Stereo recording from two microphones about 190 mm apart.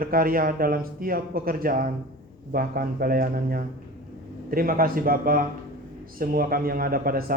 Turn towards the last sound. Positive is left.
turn(degrees=-50)  # may be behind; listen again after turning